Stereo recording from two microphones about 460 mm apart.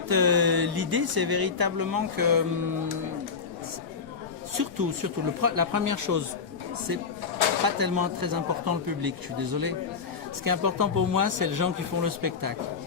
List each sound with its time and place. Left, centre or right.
0.1 s speech: right
4.5 s speech: right
7.8 s speech: right